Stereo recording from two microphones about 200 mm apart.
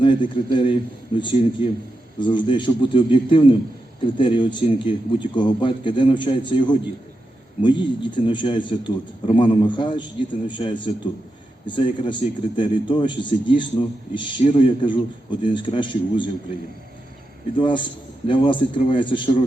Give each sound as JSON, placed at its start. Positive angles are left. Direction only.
{"t": 0.0, "sound": "a man's voice", "side_deg": 25}
{"t": 17.6, "sound": "a man's voice", "side_deg": 25}